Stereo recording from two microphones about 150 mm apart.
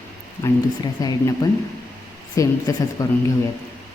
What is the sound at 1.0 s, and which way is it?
A man's voice, 25° left (ahead or behind).